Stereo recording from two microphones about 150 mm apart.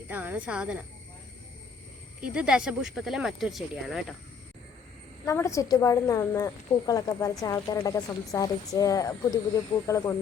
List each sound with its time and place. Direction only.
0.1 s a woman's voice: 10° right (ahead or behind)
2.2 s speech: 10° right (ahead or behind)
5.2 s a woman's voice: 20° left (ahead or behind)